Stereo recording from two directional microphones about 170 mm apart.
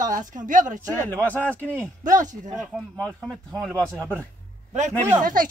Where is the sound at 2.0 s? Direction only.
50° right (ahead or behind).